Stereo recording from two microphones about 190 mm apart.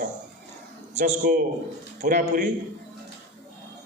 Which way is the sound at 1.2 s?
50° right (ahead or behind).